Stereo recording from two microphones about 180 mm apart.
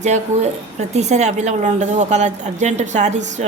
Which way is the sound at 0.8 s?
40° right (ahead or behind).